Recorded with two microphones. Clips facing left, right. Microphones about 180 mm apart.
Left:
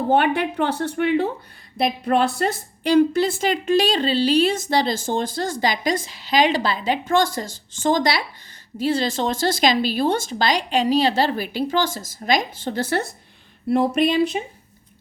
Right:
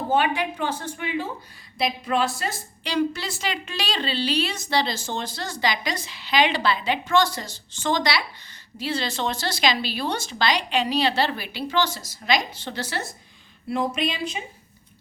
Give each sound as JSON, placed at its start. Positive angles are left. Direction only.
{"t": 0.1, "sound": "a woman's voice", "side_deg": 60}